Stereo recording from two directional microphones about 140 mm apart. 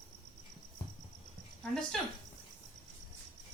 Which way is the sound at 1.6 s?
5° left (ahead or behind).